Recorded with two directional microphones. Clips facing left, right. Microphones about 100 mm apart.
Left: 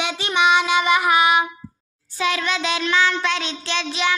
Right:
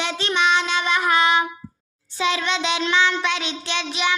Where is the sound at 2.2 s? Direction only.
25° right (ahead or behind).